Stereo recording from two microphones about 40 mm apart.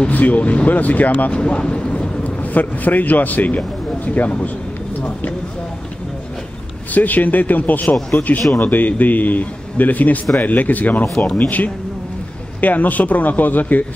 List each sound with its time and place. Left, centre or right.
0.1 s a man's voice: left
1.3 s speech: left
2.2 s a man's voice: left
6.9 s a man's voice: left